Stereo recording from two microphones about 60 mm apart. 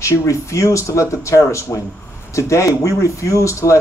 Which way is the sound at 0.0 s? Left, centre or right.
Left.